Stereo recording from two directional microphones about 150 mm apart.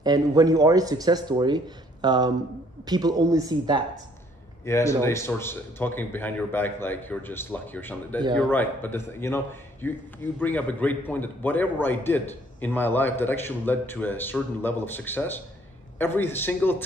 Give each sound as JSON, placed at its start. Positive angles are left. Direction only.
{"t": 0.0, "sound": "speech", "side_deg": -25}
{"t": 4.6, "sound": "a man's voice", "side_deg": 20}